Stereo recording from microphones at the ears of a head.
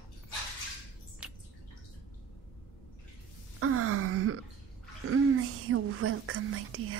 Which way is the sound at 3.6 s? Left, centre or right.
Right.